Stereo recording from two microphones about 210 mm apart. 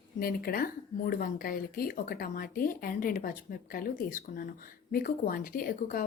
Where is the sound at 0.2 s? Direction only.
45° left (ahead or behind).